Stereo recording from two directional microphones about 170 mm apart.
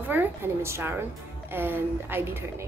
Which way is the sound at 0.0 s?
10° right (ahead or behind).